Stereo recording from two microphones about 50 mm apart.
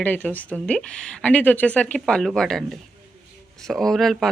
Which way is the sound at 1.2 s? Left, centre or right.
Left.